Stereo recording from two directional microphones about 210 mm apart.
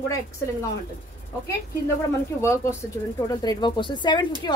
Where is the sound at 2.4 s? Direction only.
15° left (ahead or behind).